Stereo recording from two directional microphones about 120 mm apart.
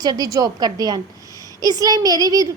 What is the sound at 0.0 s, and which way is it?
A woman's voice, 35° right (ahead or behind).